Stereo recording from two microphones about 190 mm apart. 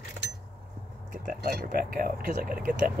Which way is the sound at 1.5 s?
50° right (ahead or behind).